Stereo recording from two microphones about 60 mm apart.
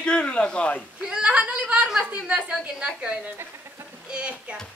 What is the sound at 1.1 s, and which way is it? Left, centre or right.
Speech, centre.